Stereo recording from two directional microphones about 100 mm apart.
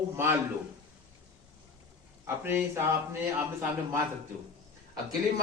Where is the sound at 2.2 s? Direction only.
20° right (ahead or behind).